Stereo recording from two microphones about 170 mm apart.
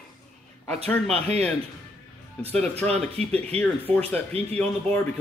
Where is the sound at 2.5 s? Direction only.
5° left (ahead or behind).